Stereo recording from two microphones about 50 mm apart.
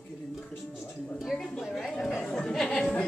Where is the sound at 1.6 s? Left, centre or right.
Centre.